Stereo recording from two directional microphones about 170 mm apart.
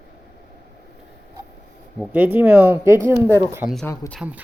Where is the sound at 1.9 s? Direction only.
10° right (ahead or behind).